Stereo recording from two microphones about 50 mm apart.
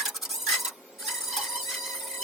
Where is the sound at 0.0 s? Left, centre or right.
Centre.